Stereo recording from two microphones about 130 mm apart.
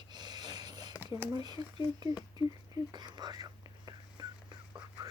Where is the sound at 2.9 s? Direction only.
35° right (ahead or behind).